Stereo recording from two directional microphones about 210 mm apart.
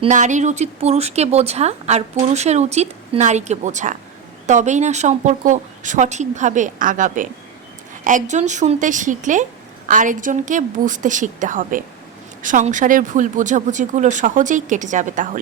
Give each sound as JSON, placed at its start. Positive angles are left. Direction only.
{"t": 0.0, "sound": "speech", "side_deg": -35}